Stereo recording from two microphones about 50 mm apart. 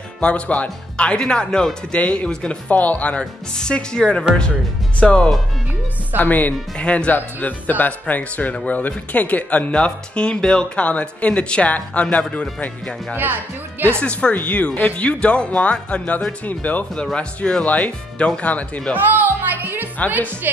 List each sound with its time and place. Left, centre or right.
0.2 s speech: left
2.7 s speech: left
6.1 s speech: left
6.8 s speech: left
7.1 s speech: left
13.1 s speech: right
14.3 s speech: left
16.9 s speech: centre
17.6 s speech: left
18.9 s speech: right